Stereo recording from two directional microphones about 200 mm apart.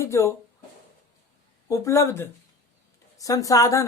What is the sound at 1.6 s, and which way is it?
Speech, 15° left (ahead or behind).